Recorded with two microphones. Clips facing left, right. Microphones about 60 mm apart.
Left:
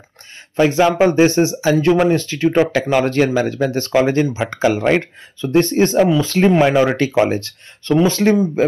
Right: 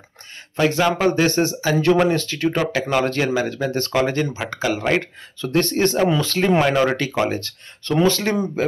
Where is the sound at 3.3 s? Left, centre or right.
Left.